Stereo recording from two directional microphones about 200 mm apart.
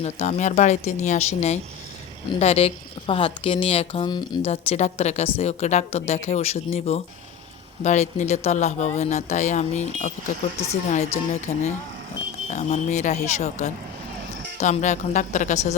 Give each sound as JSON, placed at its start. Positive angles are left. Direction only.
{"t": 0.0, "sound": "speech", "side_deg": 35}
{"t": 2.4, "sound": "a woman's voice", "side_deg": 30}